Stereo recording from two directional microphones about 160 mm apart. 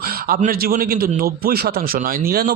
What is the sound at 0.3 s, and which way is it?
A man's voice, 65° right (ahead or behind).